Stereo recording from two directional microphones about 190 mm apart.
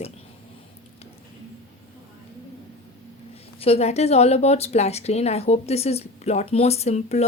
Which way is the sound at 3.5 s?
30° left (ahead or behind).